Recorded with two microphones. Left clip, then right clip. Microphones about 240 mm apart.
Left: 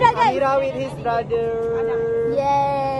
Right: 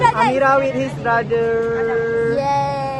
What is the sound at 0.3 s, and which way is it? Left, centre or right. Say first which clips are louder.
Speech: right 4 dB; centre.